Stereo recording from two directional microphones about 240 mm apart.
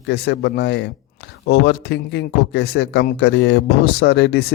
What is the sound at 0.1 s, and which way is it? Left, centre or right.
Speech, left.